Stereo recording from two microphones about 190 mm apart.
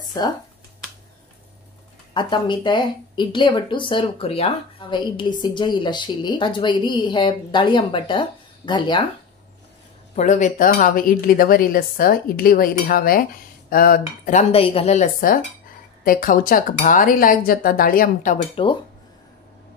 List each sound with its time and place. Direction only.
2.1 s speech: 25° left (ahead or behind)
10.1 s speech: 40° left (ahead or behind)